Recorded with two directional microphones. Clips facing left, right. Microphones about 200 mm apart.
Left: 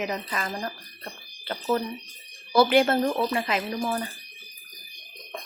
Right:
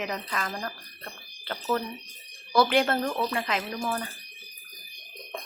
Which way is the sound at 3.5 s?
10° left (ahead or behind).